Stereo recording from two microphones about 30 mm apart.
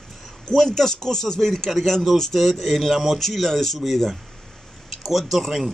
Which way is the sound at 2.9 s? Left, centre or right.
Centre.